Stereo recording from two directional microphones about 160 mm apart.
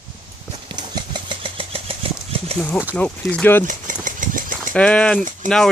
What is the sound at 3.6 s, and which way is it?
Engine, 55° right (ahead or behind).